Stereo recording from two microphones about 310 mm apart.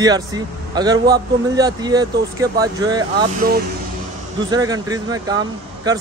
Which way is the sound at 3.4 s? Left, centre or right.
Right.